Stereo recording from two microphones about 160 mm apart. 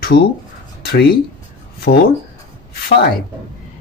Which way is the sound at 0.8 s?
75° left (ahead or behind).